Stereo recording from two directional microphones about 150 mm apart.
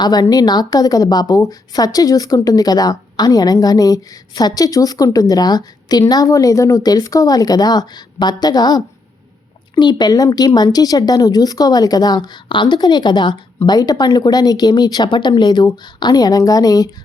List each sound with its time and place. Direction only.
0.0 s a woman's voice: 25° left (ahead or behind)